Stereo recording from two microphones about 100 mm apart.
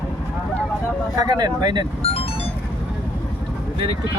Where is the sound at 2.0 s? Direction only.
75° left (ahead or behind).